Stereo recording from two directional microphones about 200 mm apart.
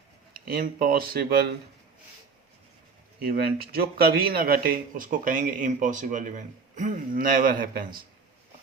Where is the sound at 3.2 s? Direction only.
50° right (ahead or behind).